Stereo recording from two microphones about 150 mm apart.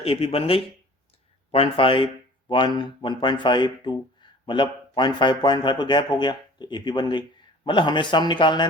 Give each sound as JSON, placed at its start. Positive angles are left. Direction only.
{"t": 0.0, "sound": "speech", "side_deg": 40}